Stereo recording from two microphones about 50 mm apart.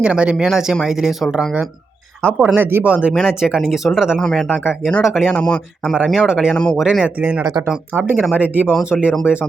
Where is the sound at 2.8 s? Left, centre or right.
Right.